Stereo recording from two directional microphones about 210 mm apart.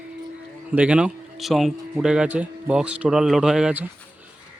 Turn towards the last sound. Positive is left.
turn(degrees=-5)  # may be behind; listen again after turning